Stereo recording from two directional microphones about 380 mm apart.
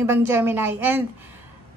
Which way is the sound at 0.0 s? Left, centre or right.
Centre.